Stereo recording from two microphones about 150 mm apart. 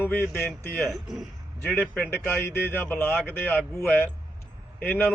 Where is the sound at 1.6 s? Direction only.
10° left (ahead or behind).